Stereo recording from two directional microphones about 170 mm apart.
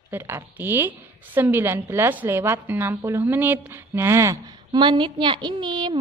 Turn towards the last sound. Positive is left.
turn(degrees=-25)  # may be behind; listen again after turning